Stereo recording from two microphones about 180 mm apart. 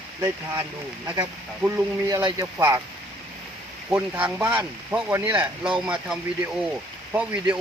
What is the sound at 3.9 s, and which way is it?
Speech, 10° right (ahead or behind).